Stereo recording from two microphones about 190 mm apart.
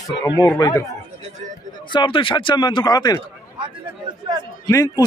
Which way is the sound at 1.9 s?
25° left (ahead or behind).